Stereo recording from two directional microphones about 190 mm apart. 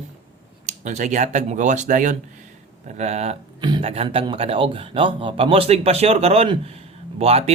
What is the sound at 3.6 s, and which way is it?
Speech, 25° right (ahead or behind).